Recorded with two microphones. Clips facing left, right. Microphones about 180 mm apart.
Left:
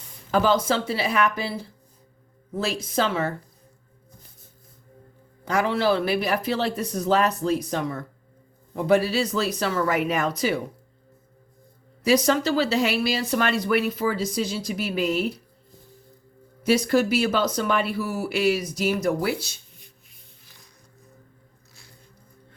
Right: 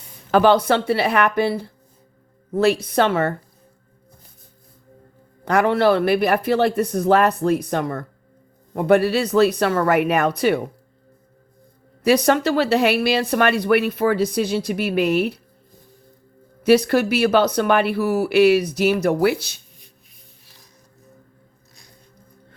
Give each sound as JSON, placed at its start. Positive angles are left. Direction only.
{"t": 0.3, "sound": "speech", "side_deg": -70}
{"t": 5.5, "sound": "speech", "side_deg": -60}
{"t": 12.0, "sound": "speech", "side_deg": -60}
{"t": 16.6, "sound": "speech", "side_deg": -65}